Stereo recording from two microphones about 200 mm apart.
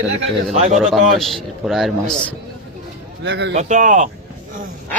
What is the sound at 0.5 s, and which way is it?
Speech, 35° right (ahead or behind).